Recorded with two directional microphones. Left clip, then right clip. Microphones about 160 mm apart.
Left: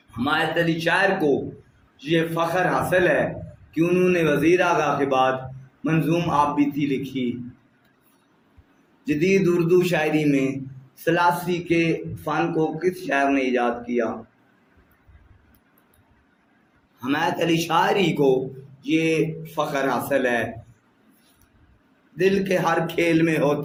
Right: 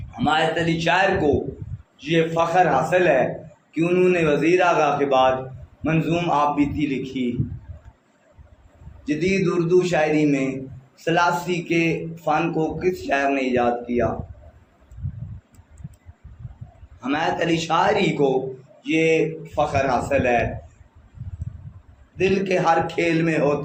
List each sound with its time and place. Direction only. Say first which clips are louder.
0.3 s speech: right 2 dB; 45° left (ahead or behind)
9.0 s speech: left 2 dB; 45° left (ahead or behind)
17.0 s speech: right 1 dB; 45° left (ahead or behind)
22.2 s speech: even; 45° left (ahead or behind)